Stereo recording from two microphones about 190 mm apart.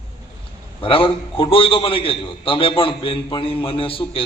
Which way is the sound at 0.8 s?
30° left (ahead or behind).